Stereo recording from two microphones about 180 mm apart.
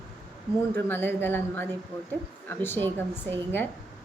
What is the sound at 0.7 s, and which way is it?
A woman's voice, 10° left (ahead or behind).